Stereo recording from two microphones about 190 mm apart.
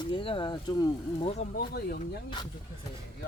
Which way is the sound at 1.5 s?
55° left (ahead or behind).